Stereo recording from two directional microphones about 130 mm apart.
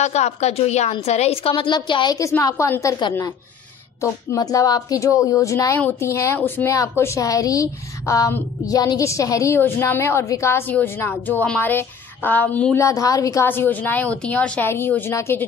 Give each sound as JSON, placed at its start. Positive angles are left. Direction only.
{"t": 0.0, "sound": "a woman's voice", "side_deg": 60}
{"t": 2.1, "sound": "a woman's voice", "side_deg": 25}
{"t": 12.8, "sound": "a woman's voice", "side_deg": 25}